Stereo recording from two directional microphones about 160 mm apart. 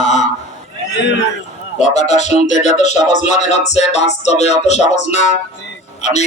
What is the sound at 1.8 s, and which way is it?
Speech, 45° left (ahead or behind).